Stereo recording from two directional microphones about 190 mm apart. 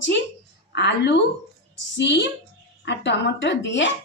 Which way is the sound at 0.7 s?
65° left (ahead or behind).